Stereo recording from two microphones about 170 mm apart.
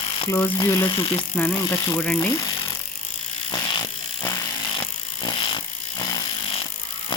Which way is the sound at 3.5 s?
20° left (ahead or behind).